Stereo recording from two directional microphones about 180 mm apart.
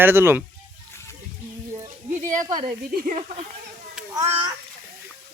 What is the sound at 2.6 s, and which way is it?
Speech, 55° right (ahead or behind).